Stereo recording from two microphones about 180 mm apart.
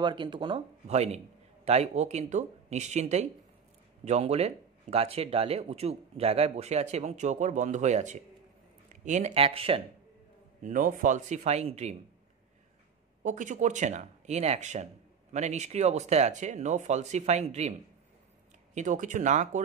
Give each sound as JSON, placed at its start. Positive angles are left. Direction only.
{"t": 0.0, "sound": "speech", "side_deg": -25}
{"t": 10.6, "sound": "speech", "side_deg": -45}
{"t": 13.2, "sound": "speech", "side_deg": -45}
{"t": 18.8, "sound": "speech", "side_deg": -45}